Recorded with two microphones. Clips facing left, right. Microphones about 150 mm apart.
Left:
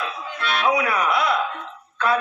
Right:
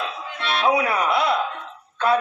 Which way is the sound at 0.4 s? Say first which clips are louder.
Right 1 dB; 30° right (ahead or behind).